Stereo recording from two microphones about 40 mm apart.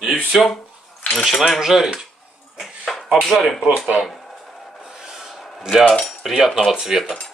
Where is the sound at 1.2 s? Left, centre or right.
Centre.